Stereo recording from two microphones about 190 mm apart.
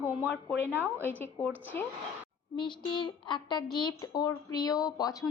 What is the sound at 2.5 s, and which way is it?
A woman's voice, 25° left (ahead or behind).